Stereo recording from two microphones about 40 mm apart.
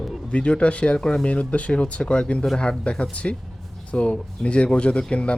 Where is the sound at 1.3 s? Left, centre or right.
Left.